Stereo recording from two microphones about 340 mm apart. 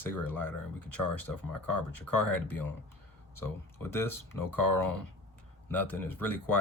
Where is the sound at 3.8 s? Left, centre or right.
Centre.